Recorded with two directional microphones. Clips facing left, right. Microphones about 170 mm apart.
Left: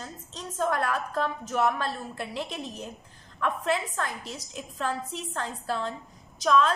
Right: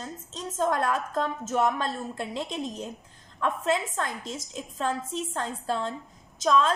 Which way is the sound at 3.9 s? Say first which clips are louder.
Right 1 dB; 25° right (ahead or behind).